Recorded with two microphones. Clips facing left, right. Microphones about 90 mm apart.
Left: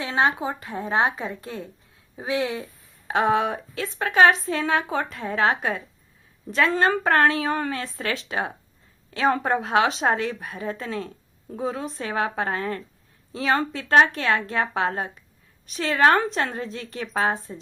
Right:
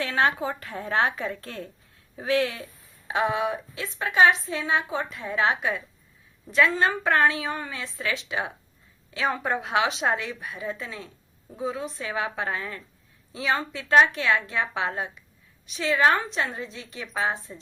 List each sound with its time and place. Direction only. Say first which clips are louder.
0.0 s a woman's voice: left 1 dB; 20° left (ahead or behind)
3.1 s a woman's voice: left 4 dB; 45° left (ahead or behind)
9.0 s a sound: left 5 dB; 40° left (ahead or behind)
9.4 s a woman's voice: left 4 dB; 40° left (ahead or behind)